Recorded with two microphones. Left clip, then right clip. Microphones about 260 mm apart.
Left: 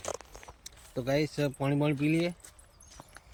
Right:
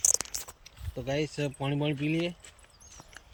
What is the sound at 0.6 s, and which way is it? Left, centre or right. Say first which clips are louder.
Speech: left 3 dB; centre.